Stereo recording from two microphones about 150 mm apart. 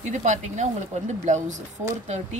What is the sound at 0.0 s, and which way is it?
Speech, 55° right (ahead or behind).